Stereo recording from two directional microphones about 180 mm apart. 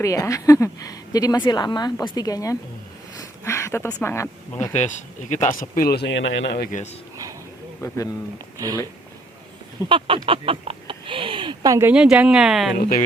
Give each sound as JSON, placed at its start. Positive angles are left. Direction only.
{"t": 0.0, "sound": "a woman's voice", "side_deg": 15}
{"t": 3.2, "sound": "a sound", "side_deg": 15}
{"t": 4.0, "sound": "speech", "side_deg": 15}
{"t": 5.3, "sound": "speech", "side_deg": 45}
{"t": 6.7, "sound": "speech", "side_deg": 45}
{"t": 7.8, "sound": "a woman's voice", "side_deg": 20}
{"t": 8.5, "sound": "speech", "side_deg": -20}
{"t": 9.9, "sound": "speech", "side_deg": -30}
{"t": 12.7, "sound": "speech", "side_deg": 50}